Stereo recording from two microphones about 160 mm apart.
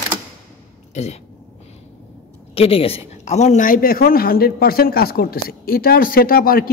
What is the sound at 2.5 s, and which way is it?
A man's voice, 35° left (ahead or behind).